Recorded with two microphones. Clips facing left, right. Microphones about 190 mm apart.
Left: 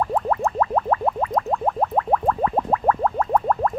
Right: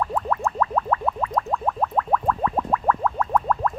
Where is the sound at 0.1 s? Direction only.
30° left (ahead or behind).